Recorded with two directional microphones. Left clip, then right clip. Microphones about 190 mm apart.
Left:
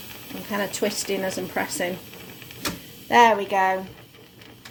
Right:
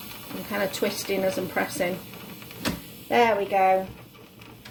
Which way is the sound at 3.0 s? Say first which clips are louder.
Left 5 dB; 30° left (ahead or behind).